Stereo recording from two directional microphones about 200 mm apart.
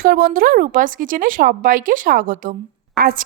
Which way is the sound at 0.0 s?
45° right (ahead or behind).